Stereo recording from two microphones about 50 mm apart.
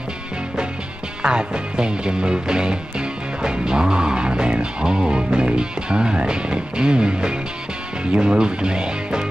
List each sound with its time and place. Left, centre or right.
1.2 s music: centre
8.0 s speech: centre